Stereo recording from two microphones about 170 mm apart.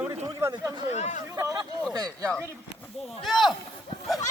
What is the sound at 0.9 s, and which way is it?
Speech, 45° left (ahead or behind).